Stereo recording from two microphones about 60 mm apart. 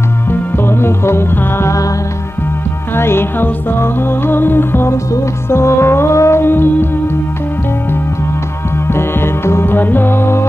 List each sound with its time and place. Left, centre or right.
0.3 s music: left
3.0 s music: left
8.8 s music: left